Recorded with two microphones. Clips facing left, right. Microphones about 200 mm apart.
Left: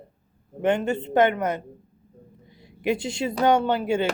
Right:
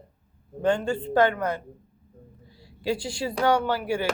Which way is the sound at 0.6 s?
20° left (ahead or behind).